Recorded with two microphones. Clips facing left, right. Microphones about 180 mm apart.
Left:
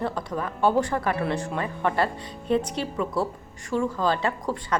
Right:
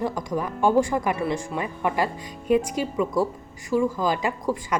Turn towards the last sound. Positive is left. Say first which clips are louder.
# right 1 dB
turn(degrees=-10)  # may be behind; listen again after turning